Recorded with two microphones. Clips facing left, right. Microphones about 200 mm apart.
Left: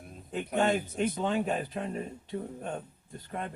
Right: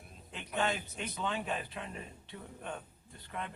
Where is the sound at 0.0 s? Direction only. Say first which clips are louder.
Left 12 dB; 45° left (ahead or behind).